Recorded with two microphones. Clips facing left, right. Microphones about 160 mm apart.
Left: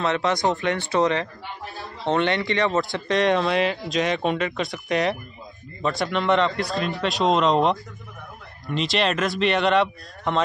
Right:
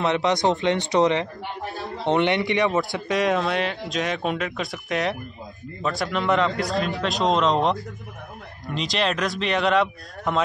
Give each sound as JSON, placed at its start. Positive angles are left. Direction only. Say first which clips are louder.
{"t": 0.0, "sound": "a man's voice", "louder": "right 1 dB", "side_deg": -20}
{"t": 2.8, "sound": "speech", "louder": "left 1 dB", "side_deg": 0}